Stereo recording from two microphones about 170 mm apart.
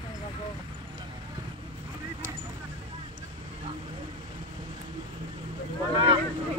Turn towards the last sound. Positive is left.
turn(degrees=-30)  # may be behind; listen again after turning